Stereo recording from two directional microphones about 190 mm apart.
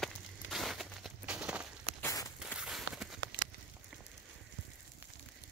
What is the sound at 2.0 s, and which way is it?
Walk, 20° left (ahead or behind).